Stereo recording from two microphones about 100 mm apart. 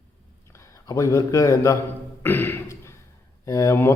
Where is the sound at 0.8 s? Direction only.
30° left (ahead or behind).